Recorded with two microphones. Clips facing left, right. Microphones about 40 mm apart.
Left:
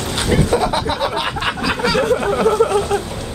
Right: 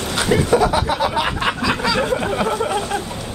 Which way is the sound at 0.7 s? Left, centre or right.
Left.